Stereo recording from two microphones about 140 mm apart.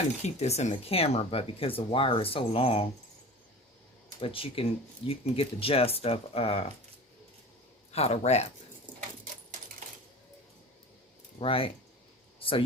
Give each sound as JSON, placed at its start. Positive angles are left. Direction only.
{"t": 0.2, "sound": "speech", "side_deg": 50}
{"t": 4.2, "sound": "speech", "side_deg": 40}
{"t": 7.9, "sound": "speech", "side_deg": 50}
{"t": 11.3, "sound": "speech", "side_deg": 40}